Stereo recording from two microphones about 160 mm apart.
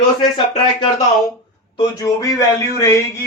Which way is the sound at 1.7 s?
20° left (ahead or behind).